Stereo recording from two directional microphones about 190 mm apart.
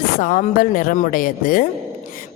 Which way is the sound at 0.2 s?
45° left (ahead or behind).